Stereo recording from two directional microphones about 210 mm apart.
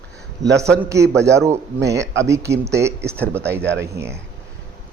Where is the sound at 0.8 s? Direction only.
15° right (ahead or behind).